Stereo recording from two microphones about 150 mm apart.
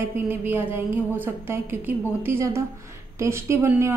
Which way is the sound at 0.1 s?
15° right (ahead or behind).